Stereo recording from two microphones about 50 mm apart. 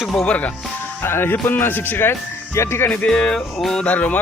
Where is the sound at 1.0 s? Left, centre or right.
Left.